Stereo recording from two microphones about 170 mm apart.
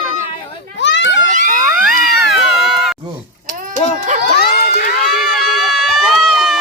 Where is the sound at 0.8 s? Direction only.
90° left.